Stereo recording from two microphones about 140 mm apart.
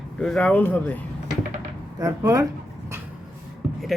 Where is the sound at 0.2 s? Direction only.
5° left (ahead or behind).